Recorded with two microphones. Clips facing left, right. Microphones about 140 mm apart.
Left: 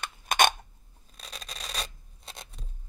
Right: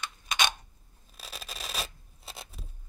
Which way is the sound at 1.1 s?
5° right (ahead or behind).